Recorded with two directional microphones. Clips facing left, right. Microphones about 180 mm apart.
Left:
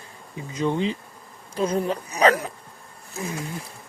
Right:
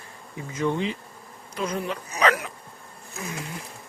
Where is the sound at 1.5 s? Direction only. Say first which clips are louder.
Left 5 dB; 30° left (ahead or behind).